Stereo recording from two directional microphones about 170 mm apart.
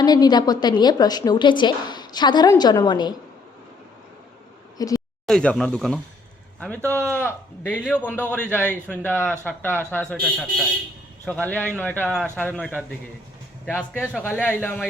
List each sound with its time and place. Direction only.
0.0 s a woman's voice: 25° left (ahead or behind)
4.8 s a sound: 20° left (ahead or behind)
5.2 s speech: 5° left (ahead or behind)
7.1 s a man's voice: 10° left (ahead or behind)